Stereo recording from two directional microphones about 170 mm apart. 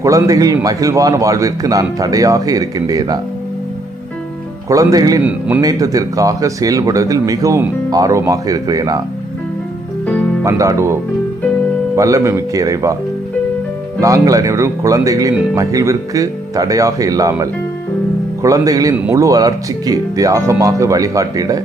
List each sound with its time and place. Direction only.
0.0 s speech: 20° right (ahead or behind)
4.7 s speech: 20° right (ahead or behind)
10.4 s speech: 20° right (ahead or behind)
11.9 s speech: 20° right (ahead or behind)
14.0 s speech: 20° right (ahead or behind)